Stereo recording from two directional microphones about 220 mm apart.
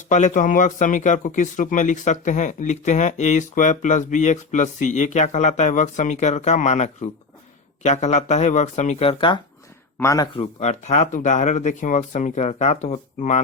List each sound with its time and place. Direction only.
0.1 s speech: 35° left (ahead or behind); by 10.2 s 15° left (ahead or behind)
10.3 s speech: 30° left (ahead or behind)